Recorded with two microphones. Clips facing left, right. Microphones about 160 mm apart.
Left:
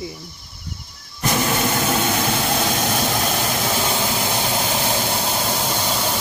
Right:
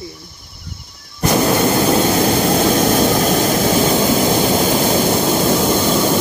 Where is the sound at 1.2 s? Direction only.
40° right (ahead or behind).